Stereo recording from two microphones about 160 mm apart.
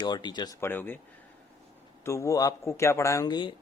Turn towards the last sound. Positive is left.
turn(degrees=25)  # may be behind; listen again after turning